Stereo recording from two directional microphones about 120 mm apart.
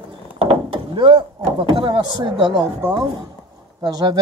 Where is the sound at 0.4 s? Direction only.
50° right (ahead or behind).